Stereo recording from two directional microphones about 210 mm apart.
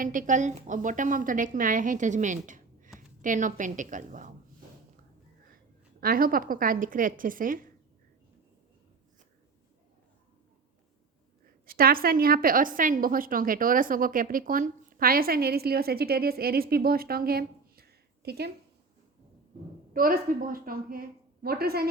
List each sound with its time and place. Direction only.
0.0 s a woman's voice: 40° right (ahead or behind)
6.0 s a woman's voice: 45° right (ahead or behind)
11.6 s a woman's voice: 45° right (ahead or behind)
19.9 s a woman's voice: 40° right (ahead or behind)